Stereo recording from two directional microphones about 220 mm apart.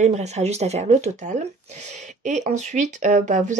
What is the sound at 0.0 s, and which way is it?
Speech, 30° right (ahead or behind).